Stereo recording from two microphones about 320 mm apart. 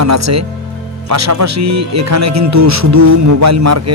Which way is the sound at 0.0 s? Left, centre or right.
Right.